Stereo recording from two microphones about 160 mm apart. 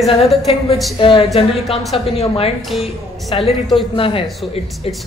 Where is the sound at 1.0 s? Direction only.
35° left (ahead or behind).